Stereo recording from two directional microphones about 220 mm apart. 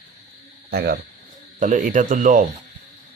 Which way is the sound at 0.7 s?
45° right (ahead or behind).